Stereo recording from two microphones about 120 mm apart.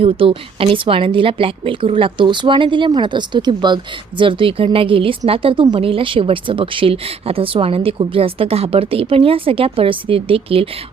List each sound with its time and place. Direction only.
0.0 s speech: 50° right (ahead or behind)